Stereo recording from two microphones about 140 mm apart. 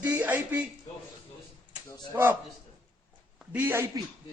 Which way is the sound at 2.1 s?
20° right (ahead or behind).